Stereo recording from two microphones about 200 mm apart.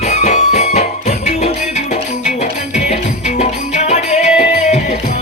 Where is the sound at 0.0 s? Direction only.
35° left (ahead or behind).